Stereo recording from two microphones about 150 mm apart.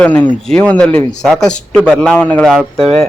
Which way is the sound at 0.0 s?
10° left (ahead or behind).